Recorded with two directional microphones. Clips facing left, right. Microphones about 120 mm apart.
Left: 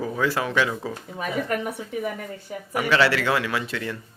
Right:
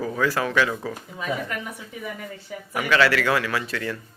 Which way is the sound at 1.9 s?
50° left (ahead or behind).